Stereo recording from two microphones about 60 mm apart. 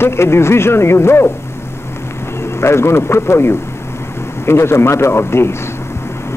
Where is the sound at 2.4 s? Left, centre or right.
Left.